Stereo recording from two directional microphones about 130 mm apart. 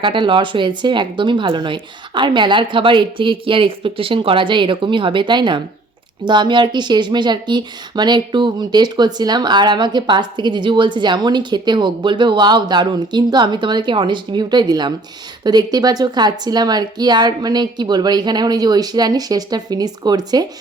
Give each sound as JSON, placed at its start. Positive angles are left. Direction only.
{"t": 0.0, "sound": "speech", "side_deg": -40}